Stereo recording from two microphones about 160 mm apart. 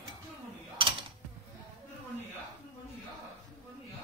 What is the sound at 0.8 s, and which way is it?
Mechanisms, 30° right (ahead or behind).